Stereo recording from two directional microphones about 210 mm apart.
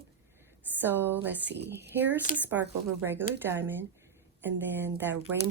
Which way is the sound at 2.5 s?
10° right (ahead or behind).